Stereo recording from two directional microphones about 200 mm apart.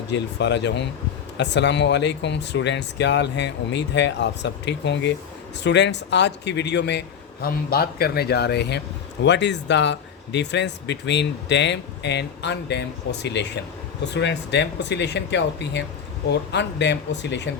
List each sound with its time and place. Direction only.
0.1 s speech: 60° left (ahead or behind)
7.4 s speech: 50° left (ahead or behind)